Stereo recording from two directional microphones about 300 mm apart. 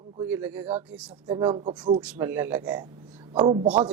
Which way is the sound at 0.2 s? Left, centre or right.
Centre.